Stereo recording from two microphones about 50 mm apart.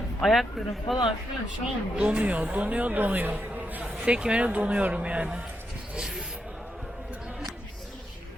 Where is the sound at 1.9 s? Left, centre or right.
Right.